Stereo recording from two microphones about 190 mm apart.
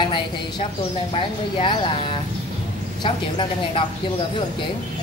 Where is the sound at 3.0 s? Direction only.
25° left (ahead or behind).